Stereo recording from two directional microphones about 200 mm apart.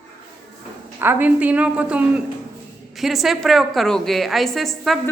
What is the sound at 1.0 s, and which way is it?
A woman's voice, 10° right (ahead or behind).